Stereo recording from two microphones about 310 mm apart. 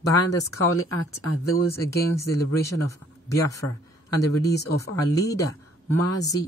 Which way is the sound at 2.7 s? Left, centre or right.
Centre.